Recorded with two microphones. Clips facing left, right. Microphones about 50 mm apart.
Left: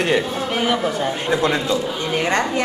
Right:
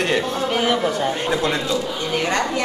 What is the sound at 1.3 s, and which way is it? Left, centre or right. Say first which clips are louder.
Speech: left 2 dB; centre.